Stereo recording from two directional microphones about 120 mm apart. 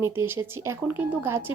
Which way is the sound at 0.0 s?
20° right (ahead or behind).